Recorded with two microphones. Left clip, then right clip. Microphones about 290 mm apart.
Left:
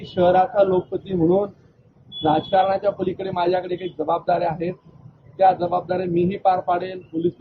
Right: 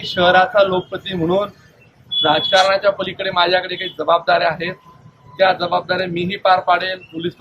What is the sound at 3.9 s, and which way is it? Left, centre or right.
Speech, right.